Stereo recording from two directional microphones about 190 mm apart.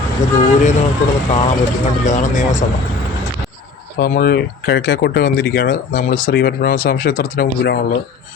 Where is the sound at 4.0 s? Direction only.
50° left (ahead or behind).